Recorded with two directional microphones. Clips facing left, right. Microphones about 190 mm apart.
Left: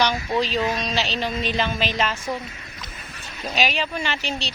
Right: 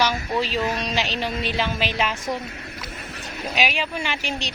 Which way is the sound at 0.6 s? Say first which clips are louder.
Left 1 dB; 10° left (ahead or behind).